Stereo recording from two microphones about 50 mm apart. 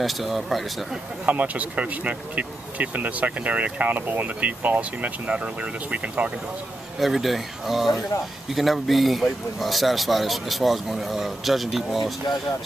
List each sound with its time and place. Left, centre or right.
0.0 s speech: centre
1.2 s speech: right
7.0 s speech: centre